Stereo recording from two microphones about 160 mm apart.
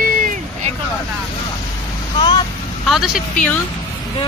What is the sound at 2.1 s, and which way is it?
Vehicle, 30° left (ahead or behind).